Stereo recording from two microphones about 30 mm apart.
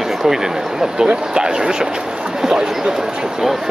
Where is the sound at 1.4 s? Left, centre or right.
Right.